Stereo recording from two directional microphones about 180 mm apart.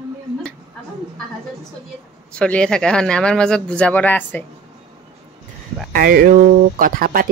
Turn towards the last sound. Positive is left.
turn(degrees=-50)  # may be behind; listen again after turning